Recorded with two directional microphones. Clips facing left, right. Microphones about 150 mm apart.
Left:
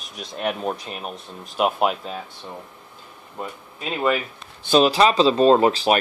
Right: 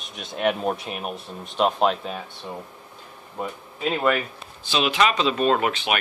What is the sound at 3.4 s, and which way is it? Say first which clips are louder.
Speech: right 2 dB; centre (ahead or behind).